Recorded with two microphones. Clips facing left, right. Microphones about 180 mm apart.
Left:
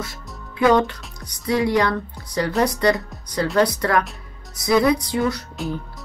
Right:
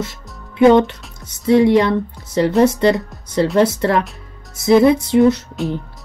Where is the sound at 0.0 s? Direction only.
25° right (ahead or behind).